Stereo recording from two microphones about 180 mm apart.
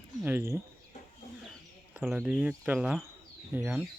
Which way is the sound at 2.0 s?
5° right (ahead or behind).